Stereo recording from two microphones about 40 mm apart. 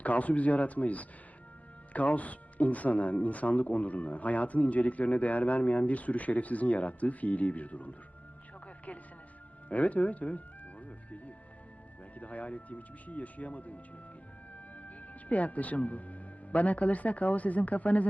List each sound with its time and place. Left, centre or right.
0.0 s speech: left
9.6 s speech: left
10.8 s music: left
12.2 s speech: left